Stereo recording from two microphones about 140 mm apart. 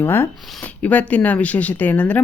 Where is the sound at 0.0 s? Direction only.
15° left (ahead or behind).